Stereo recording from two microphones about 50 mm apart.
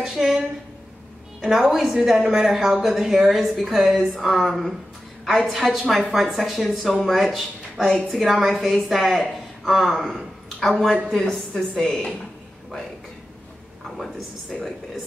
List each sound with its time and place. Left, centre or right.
0.0 s a woman's voice: centre
1.4 s a woman's voice: centre